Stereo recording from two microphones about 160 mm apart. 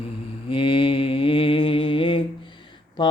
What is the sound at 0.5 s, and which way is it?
Mantra, 30° left (ahead or behind).